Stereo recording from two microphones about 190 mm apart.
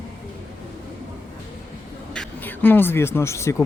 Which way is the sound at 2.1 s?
10° left (ahead or behind).